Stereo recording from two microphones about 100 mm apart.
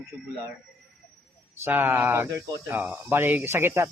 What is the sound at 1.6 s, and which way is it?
Speech, 20° right (ahead or behind).